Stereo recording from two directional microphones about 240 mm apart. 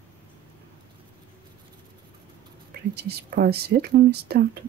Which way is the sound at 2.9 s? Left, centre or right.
Right.